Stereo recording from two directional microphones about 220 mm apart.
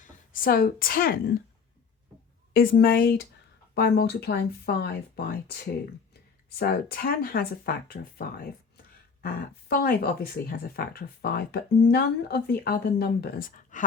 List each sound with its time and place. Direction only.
0.3 s a woman's voice: 40° left (ahead or behind)
2.5 s a woman's voice: 40° left (ahead or behind)
6.6 s speech: 45° left (ahead or behind)